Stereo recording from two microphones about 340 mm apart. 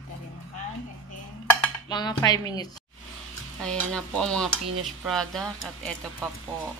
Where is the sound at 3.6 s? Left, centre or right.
Centre.